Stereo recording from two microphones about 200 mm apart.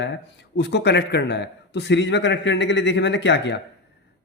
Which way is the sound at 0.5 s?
60° left (ahead or behind).